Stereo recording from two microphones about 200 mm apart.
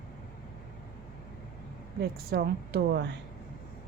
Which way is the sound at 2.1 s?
50° right (ahead or behind).